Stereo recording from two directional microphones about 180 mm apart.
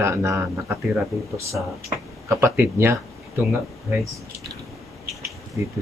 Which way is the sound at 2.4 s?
15° right (ahead or behind).